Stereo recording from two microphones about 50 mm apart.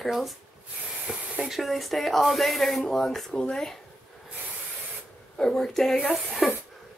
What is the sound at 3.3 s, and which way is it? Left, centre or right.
Speech, centre.